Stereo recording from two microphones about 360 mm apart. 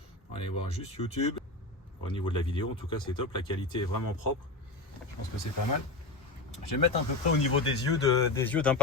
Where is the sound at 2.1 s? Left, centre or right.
Centre.